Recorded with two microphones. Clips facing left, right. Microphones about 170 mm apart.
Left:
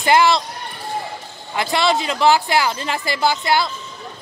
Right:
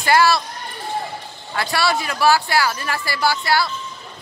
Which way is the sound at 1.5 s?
20° left (ahead or behind).